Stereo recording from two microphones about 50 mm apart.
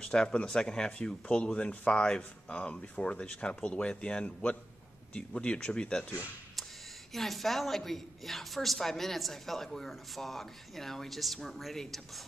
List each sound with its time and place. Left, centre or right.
0.0 s speech: centre
7.1 s a woman's voice: centre